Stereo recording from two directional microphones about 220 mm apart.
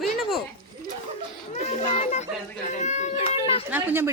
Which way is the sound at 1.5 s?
30° left (ahead or behind).